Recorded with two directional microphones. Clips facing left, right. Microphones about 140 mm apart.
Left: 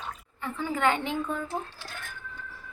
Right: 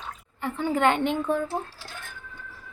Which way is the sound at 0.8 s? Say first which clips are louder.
Right 3 dB; 60° right (ahead or behind).